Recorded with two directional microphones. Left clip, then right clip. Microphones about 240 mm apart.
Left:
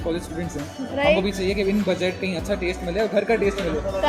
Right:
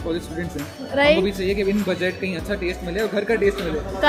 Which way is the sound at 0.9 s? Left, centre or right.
Right.